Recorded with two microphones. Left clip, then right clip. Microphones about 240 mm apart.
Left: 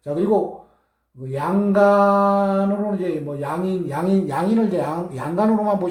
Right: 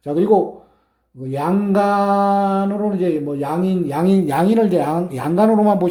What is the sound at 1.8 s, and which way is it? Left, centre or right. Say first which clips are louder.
Speech: left 2 dB; right.